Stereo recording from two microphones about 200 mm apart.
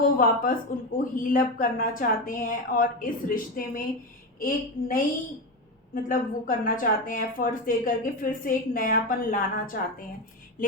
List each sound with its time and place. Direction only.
0.0 s a woman's voice: 45° left (ahead or behind)